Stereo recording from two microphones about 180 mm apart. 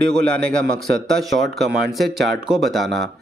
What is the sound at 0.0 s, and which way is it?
Speech, 5° left (ahead or behind).